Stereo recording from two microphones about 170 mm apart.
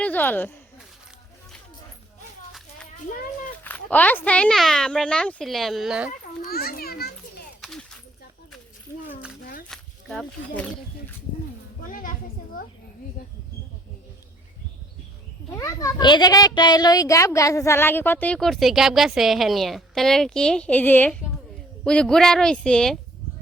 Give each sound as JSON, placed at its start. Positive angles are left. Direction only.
{"t": 0.0, "sound": "a child's voice", "side_deg": 10}
{"t": 2.5, "sound": "children playing", "side_deg": 0}
{"t": 3.6, "sound": "speech", "side_deg": 10}
{"t": 6.4, "sound": "a child's voice", "side_deg": 60}
{"t": 7.6, "sound": "a sound", "side_deg": 0}
{"t": 9.6, "sound": "a sound", "side_deg": 5}
{"t": 11.8, "sound": "children playing", "side_deg": 50}
{"t": 15.4, "sound": "a child's voice", "side_deg": 20}